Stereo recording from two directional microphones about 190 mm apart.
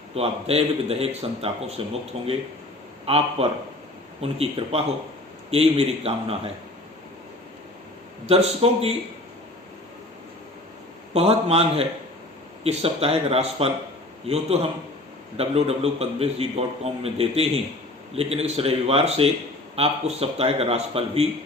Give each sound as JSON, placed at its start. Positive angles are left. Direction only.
{"t": 0.1, "sound": "a man's voice", "side_deg": -30}
{"t": 8.3, "sound": "a man's voice", "side_deg": -30}
{"t": 11.1, "sound": "a man's voice", "side_deg": -30}